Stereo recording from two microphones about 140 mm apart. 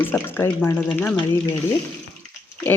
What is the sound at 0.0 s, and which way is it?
Speech, 15° left (ahead or behind).